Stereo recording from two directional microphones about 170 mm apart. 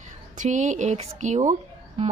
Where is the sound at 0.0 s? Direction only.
45° right (ahead or behind).